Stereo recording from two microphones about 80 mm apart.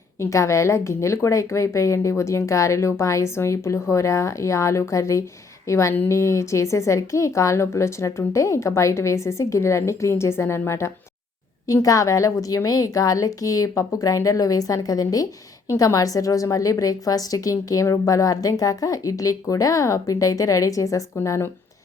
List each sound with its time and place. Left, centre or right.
0.2 s a woman's voice: left
21.2 s a woman's voice: left